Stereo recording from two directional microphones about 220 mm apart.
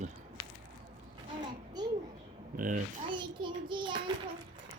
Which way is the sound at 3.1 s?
20° right (ahead or behind).